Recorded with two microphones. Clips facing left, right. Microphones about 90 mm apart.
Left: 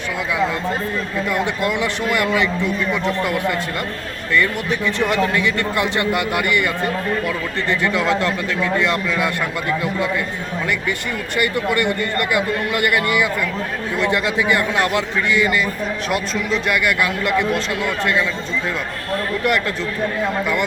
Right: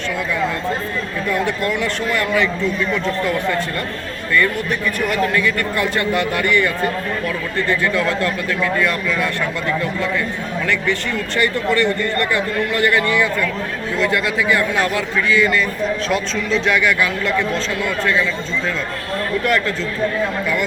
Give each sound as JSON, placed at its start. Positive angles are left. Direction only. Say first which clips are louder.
{"t": 1.3, "sound": "a man's voice", "louder": "right 2 dB", "side_deg": 15}
{"t": 11.3, "sound": "a man's voice", "louder": "right 1 dB", "side_deg": 15}
{"t": 19.5, "sound": "a man's voice", "louder": "even", "side_deg": 15}